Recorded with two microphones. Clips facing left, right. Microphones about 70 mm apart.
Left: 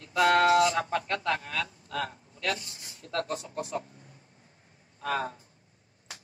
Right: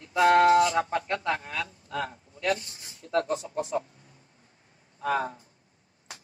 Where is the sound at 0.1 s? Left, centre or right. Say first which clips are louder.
Right 3 dB; right.